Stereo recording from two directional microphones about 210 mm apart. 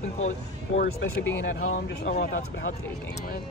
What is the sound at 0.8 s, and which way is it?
Speech, 45° left (ahead or behind).